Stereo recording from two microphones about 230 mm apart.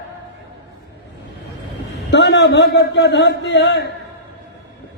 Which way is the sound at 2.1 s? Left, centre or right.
Left.